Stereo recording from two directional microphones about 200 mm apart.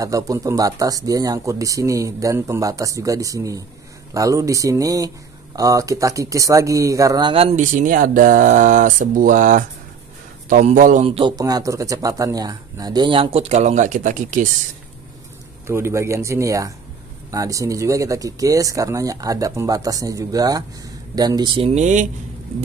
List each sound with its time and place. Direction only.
0.0 s speech: 15° right (ahead or behind); by 11.1 s 40° right (ahead or behind)
11.1 s speech: 25° right (ahead or behind)
15.6 s speech: 15° right (ahead or behind); by 22.0 s 35° right (ahead or behind)